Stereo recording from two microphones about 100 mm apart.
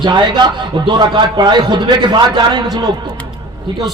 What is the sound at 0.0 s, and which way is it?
A man's voice, 50° right (ahead or behind).